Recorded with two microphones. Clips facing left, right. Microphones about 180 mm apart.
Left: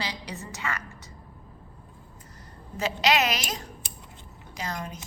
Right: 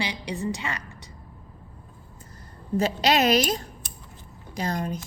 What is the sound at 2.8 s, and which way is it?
A woman's voice, 35° right (ahead or behind).